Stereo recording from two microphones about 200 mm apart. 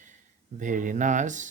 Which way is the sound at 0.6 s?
40° right (ahead or behind).